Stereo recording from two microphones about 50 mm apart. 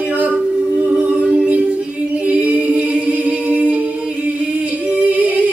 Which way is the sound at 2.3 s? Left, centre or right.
Right.